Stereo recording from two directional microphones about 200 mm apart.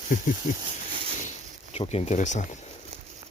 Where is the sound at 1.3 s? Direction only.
30° left (ahead or behind).